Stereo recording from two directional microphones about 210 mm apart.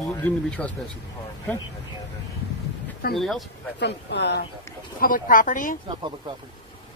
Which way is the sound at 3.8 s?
55° left (ahead or behind).